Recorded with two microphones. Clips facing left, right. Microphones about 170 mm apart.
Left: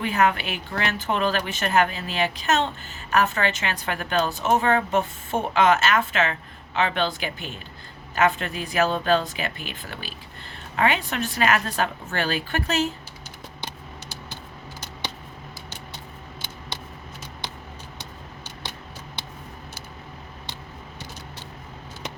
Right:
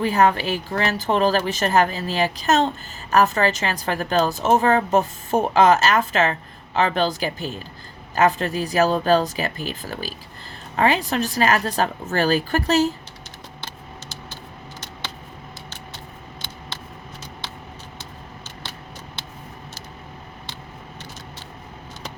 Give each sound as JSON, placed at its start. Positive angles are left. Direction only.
{"t": 0.0, "sound": "a woman's voice", "side_deg": -35}